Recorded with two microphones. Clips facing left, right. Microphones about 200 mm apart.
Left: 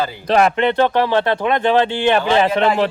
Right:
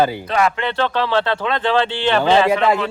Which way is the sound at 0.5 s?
20° left (ahead or behind).